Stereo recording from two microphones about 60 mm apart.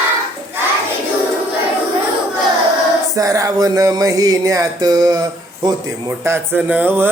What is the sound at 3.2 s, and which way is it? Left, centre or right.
Music, right.